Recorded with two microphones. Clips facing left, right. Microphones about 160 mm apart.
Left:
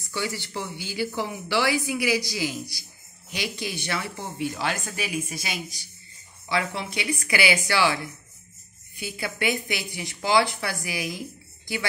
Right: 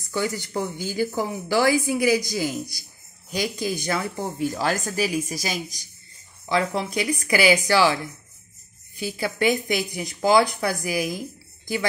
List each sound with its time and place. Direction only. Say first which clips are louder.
0.0 s speech: right 4 dB; 45° right (ahead or behind)
9.0 s speech: right 5 dB; 40° right (ahead or behind)